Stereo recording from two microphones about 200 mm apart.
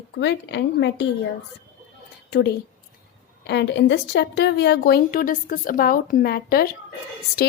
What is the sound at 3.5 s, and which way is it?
A woman's voice, 60° left (ahead or behind).